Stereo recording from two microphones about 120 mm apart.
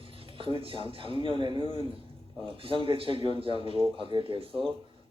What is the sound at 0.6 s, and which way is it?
A man's voice, 50° right (ahead or behind).